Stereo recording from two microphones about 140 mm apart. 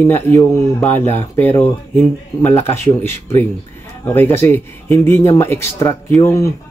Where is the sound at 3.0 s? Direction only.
15° left (ahead or behind).